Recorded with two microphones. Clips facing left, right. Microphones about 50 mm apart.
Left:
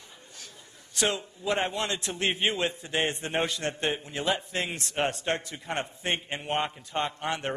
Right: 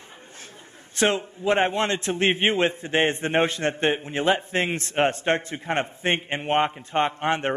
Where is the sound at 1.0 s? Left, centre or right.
Right.